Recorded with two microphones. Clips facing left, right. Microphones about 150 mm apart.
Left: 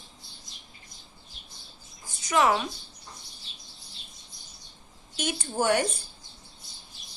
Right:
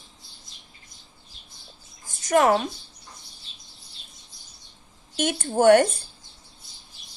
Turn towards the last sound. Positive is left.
turn(degrees=-55)  # may be behind; listen again after turning